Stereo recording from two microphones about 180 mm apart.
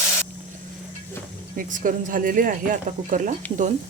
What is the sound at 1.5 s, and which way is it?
Speech, 50° right (ahead or behind).